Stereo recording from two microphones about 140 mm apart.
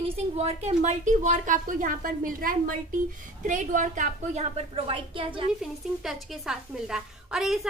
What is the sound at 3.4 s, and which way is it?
A woman's voice, 60° right (ahead or behind).